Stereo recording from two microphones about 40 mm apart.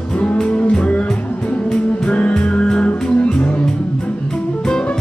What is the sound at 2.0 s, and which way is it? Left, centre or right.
Music, left.